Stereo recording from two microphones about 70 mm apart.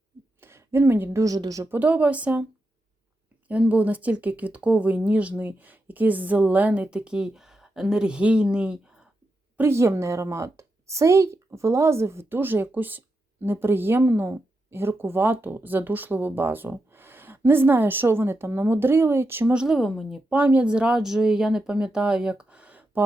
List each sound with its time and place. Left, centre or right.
0.4 s a sound: right
1.2 s a woman's voice: right
1.6 s speech: right
3.5 s speech: centre
9.6 s a woman's voice: right
19.6 s speech: centre
20.3 s speech: right